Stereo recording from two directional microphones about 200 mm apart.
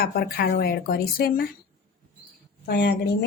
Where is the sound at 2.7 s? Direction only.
55° left (ahead or behind).